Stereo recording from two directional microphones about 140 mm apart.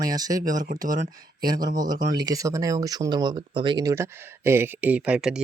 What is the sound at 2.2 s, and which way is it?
Speech, 25° right (ahead or behind).